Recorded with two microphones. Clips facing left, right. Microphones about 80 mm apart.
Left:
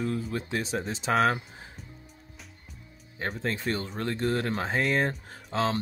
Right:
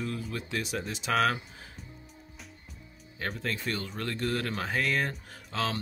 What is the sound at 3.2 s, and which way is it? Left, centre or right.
Speech, left.